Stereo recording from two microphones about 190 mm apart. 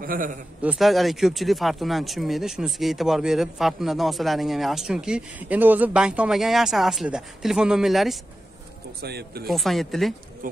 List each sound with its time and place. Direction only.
0.0 s a man's voice: 45° right (ahead or behind)
0.6 s speech: 5° right (ahead or behind)
9.0 s speech: 55° right (ahead or behind)
9.5 s speech: centre (ahead or behind)
10.4 s speech: 45° right (ahead or behind)